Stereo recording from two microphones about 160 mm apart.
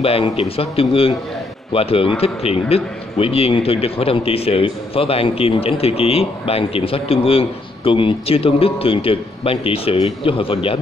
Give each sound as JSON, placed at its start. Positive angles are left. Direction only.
{"t": 0.0, "sound": "a man's voice", "side_deg": 40}